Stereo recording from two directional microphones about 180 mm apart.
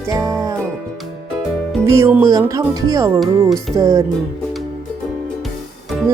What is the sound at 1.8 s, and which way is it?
Speech, 15° right (ahead or behind).